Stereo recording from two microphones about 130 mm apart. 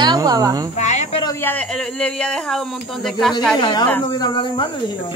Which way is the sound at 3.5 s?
35° left (ahead or behind).